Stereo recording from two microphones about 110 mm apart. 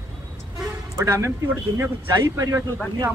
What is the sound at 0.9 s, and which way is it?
A man's voice, 25° right (ahead or behind).